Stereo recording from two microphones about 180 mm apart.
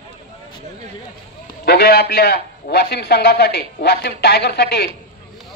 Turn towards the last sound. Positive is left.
turn(degrees=65)  # may be behind; listen again after turning